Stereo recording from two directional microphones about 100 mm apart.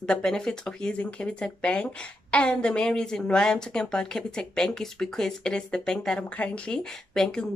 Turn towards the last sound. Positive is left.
turn(degrees=5)  # may be behind; listen again after turning